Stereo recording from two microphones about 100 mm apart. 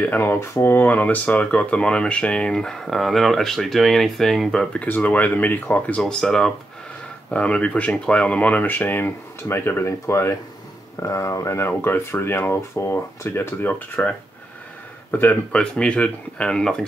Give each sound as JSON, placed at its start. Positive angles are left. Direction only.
{"t": 0.0, "sound": "speech", "side_deg": 20}
{"t": 4.8, "sound": "speech", "side_deg": 15}
{"t": 15.5, "sound": "speech", "side_deg": 10}